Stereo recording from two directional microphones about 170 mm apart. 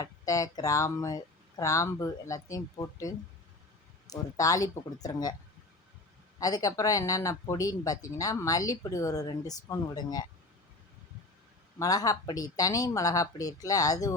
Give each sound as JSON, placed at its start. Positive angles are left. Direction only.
{"t": 0.0, "sound": "speech", "side_deg": 20}
{"t": 6.4, "sound": "speech", "side_deg": 20}
{"t": 11.8, "sound": "speech", "side_deg": 20}